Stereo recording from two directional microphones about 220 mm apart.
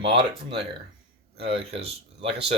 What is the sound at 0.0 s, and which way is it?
Speech, 25° right (ahead or behind).